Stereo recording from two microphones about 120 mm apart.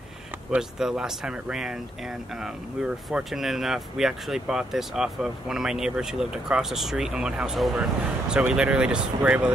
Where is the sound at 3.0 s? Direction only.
Centre (ahead or behind).